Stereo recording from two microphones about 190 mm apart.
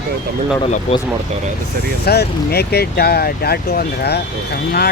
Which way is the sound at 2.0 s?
55° left (ahead or behind).